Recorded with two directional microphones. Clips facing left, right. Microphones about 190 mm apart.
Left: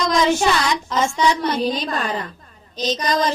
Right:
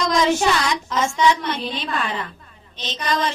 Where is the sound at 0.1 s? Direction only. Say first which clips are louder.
Left 1 dB; 35° left (ahead or behind).